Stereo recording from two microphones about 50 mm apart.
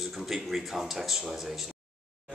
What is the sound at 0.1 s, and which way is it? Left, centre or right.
Speech, centre.